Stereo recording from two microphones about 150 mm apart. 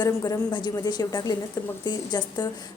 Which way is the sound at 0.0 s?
25° left (ahead or behind).